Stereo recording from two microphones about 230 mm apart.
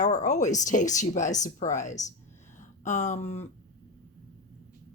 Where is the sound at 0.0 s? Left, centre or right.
Left.